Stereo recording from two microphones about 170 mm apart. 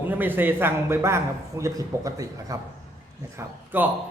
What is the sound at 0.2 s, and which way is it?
A man's voice, 10° right (ahead or behind).